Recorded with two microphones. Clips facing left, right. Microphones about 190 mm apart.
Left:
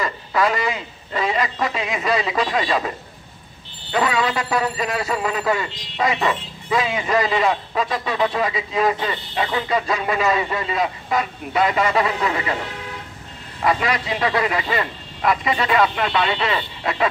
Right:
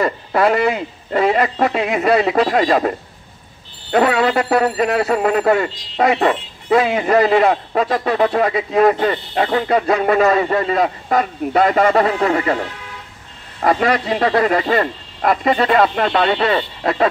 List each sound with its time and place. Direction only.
0.0 s a man's voice: 55° right (ahead or behind)
3.9 s a man's voice: 55° right (ahead or behind)
13.6 s a man's voice: 45° right (ahead or behind)